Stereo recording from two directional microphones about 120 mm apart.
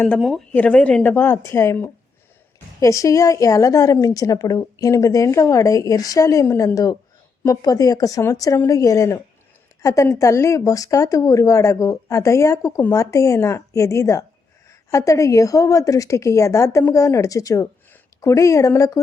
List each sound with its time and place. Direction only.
0.2 s speech: centre (ahead or behind)
0.5 s a woman's voice: 10° left (ahead or behind); by 18.9 s 25° left (ahead or behind)